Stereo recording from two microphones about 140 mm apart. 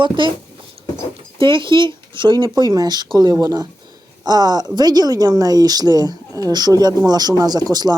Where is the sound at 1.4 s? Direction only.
35° right (ahead or behind).